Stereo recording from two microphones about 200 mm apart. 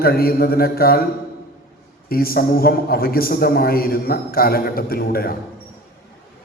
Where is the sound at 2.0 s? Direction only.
50° left (ahead or behind).